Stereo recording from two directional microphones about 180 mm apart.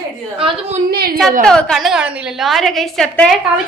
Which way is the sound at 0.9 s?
60° right (ahead or behind).